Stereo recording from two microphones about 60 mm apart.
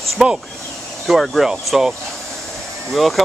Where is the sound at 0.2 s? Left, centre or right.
Centre.